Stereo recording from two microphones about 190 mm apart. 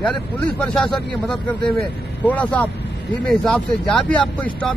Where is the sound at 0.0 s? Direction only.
5° left (ahead or behind).